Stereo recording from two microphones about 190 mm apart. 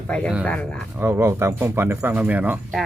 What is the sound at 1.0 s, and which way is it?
Speech, 10° right (ahead or behind).